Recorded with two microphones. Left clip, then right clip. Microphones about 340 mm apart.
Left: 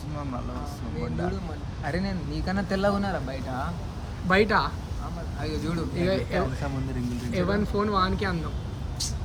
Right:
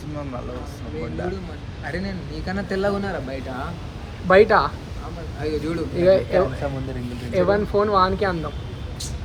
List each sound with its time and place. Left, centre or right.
1.8 s speech: left
4.3 s speech: centre
5.4 s speech: centre
6.0 s speech: centre